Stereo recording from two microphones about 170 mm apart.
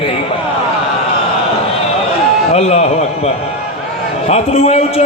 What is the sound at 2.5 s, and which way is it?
A man's voice, 40° left (ahead or behind).